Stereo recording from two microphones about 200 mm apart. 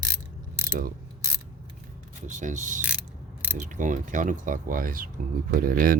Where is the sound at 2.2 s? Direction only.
40° right (ahead or behind).